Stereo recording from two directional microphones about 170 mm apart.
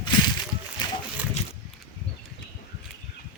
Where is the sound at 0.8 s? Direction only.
25° left (ahead or behind).